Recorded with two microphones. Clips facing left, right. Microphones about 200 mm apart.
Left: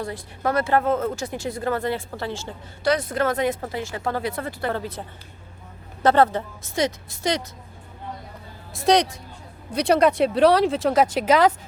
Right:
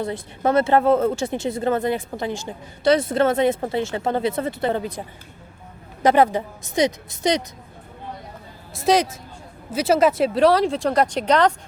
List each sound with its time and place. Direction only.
0.0 s speech: 25° right (ahead or behind)
2.9 s a woman's voice: 25° right (ahead or behind)
8.7 s speech: centre (ahead or behind)